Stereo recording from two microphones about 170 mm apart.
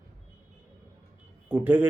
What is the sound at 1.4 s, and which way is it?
Speech, 10° right (ahead or behind).